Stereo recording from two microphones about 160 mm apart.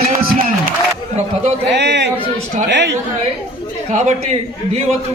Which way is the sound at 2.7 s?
90° right.